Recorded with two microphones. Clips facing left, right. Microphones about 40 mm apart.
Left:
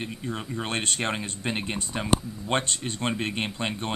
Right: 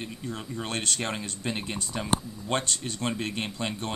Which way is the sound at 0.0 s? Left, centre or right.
Left.